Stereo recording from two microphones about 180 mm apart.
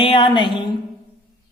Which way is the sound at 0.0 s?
30° left (ahead or behind).